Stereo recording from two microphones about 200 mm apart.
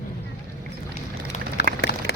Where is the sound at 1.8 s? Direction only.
55° left (ahead or behind).